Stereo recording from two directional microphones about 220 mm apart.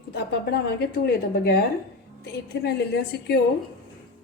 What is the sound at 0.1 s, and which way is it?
A woman's voice, 45° left (ahead or behind).